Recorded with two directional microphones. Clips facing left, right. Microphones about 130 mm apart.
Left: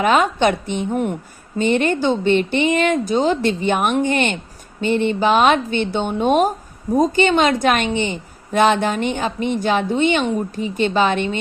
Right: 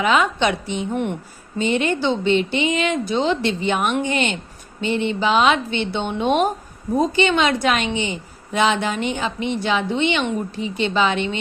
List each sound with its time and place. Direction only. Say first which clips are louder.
0.0 s a woman's voice: left 3 dB; 50° left (ahead or behind)